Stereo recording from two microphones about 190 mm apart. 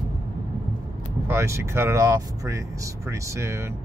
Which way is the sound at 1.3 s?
15° right (ahead or behind).